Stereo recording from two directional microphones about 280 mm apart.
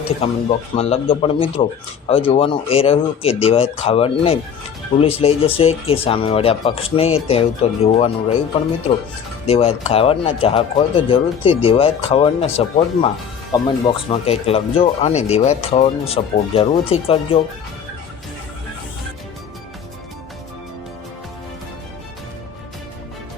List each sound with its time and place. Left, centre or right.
0.2 s speech: left
9.5 s speech: left